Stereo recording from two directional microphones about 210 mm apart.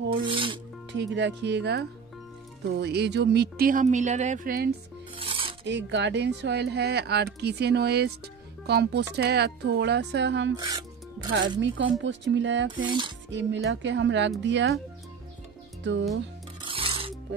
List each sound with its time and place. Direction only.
0.2 s speech: 25° right (ahead or behind)
0.9 s speech: 55° right (ahead or behind)
5.1 s filing: 25° right (ahead or behind)
5.7 s speech: 55° right (ahead or behind)
10.5 s speech: 20° right (ahead or behind)
11.6 s speech: 60° right (ahead or behind)
12.7 s speech: 25° right (ahead or behind)
13.3 s speech: 60° right (ahead or behind)
15.8 s speech: 60° right (ahead or behind)
16.6 s filing: 25° right (ahead or behind)